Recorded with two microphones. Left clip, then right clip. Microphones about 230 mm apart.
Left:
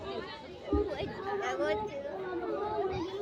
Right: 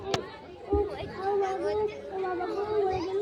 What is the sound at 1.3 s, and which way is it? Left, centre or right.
Chatter, left.